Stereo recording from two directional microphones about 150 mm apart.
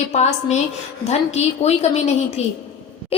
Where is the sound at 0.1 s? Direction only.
50° left (ahead or behind).